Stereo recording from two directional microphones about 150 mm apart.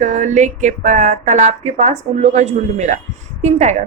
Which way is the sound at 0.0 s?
55° right (ahead or behind).